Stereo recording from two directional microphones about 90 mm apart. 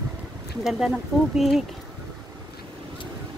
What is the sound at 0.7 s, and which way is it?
Speech, 5° right (ahead or behind).